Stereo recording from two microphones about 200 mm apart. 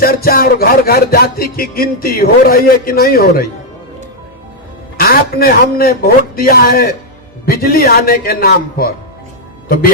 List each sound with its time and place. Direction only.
0.0 s music: 50° left (ahead or behind)
4.9 s music: 50° left (ahead or behind)